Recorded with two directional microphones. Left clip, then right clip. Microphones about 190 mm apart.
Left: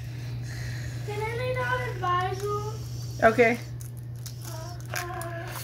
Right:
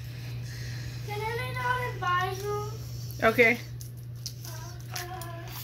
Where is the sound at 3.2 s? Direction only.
10° right (ahead or behind).